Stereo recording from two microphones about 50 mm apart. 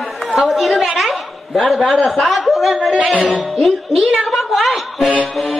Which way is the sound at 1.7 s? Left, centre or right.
Centre.